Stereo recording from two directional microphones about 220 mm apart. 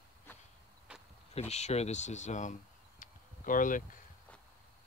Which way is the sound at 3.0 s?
35° left (ahead or behind).